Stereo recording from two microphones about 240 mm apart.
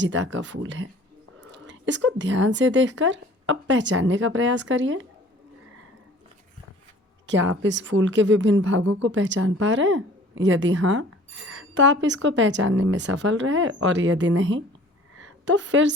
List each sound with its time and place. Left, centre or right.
0.0 s a woman's voice: right
7.3 s a woman's voice: right